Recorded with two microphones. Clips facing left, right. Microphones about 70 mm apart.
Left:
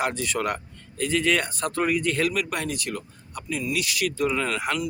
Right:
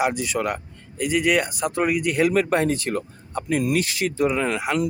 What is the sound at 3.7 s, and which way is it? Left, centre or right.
Speech, right.